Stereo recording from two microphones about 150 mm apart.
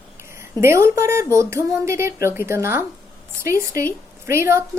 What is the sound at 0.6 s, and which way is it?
A woman's voice, 15° right (ahead or behind).